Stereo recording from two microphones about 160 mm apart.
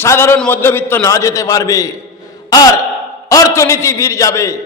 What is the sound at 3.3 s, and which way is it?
A man's voice, 20° left (ahead or behind).